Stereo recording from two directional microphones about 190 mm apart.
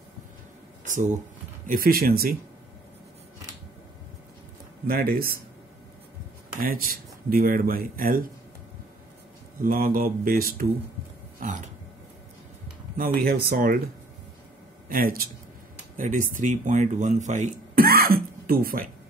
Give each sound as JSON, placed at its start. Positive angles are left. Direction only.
{"t": 0.8, "sound": "speech", "side_deg": -40}
{"t": 4.8, "sound": "speech", "side_deg": -50}
{"t": 6.6, "sound": "speech", "side_deg": -50}
{"t": 9.6, "sound": "speech", "side_deg": -50}
{"t": 11.3, "sound": "a sound", "side_deg": -40}
{"t": 12.9, "sound": "speech", "side_deg": -50}
{"t": 14.9, "sound": "speech", "side_deg": -50}